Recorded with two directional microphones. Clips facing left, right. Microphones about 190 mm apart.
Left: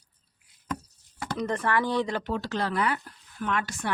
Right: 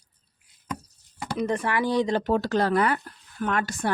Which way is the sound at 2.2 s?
45° right (ahead or behind).